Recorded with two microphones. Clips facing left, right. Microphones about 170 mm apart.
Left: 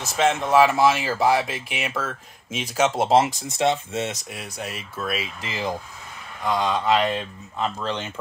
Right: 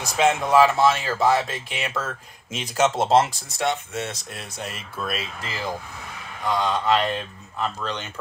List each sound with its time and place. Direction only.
0.0 s speech: 5° left (ahead or behind); by 4.3 s 20° left (ahead or behind)
4.3 s speech: 5° left (ahead or behind)
5.4 s speech: 20° left (ahead or behind)